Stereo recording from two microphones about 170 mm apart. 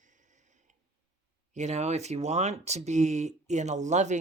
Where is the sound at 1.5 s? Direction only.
40° right (ahead or behind).